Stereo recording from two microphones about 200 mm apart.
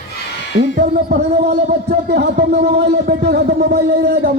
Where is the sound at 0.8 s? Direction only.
50° right (ahead or behind).